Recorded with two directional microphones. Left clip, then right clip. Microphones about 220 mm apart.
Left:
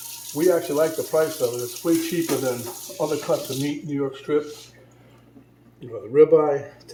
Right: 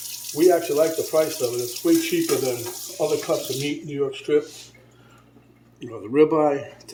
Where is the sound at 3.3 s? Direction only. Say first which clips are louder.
Left 1 dB; 40° right (ahead or behind).